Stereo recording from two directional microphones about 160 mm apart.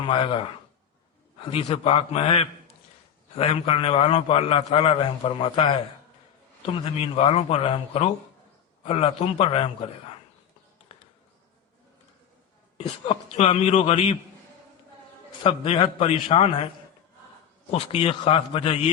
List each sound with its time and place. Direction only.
0.1 s a man's voice: 35° left (ahead or behind)
1.5 s a man's voice: 35° left (ahead or behind)
6.7 s a man's voice: 35° left (ahead or behind)
10.9 s insect: 35° left (ahead or behind)
12.7 s a man's voice: 35° left (ahead or behind)
15.4 s a man's voice: 35° left (ahead or behind)
17.7 s a man's voice: 35° left (ahead or behind)